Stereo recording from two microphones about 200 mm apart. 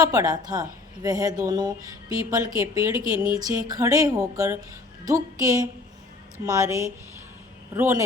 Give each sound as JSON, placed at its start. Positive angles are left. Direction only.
{"t": 0.0, "sound": "a woman's voice", "side_deg": -15}